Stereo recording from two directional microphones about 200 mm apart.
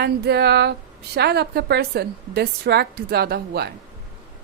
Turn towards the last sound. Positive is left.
turn(degrees=-55)  # may be behind; listen again after turning